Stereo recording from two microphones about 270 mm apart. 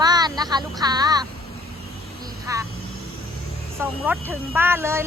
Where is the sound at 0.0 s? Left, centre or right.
Centre.